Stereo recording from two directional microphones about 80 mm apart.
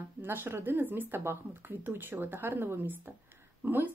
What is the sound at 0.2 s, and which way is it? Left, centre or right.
Speech, right.